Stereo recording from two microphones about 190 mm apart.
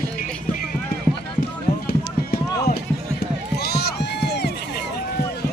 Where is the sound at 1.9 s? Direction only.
50° left (ahead or behind).